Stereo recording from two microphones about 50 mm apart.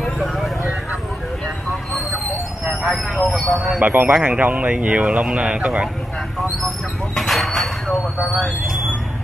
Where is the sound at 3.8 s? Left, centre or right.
Right.